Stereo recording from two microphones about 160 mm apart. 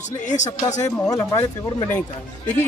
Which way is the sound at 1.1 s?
20° left (ahead or behind).